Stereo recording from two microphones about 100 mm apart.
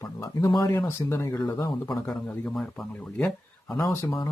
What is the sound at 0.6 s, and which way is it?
Speech, 30° left (ahead or behind).